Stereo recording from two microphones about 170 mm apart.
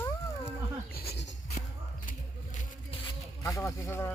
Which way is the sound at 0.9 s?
70° left (ahead or behind).